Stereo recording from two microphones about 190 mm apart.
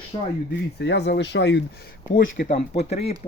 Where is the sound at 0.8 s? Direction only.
60° left (ahead or behind).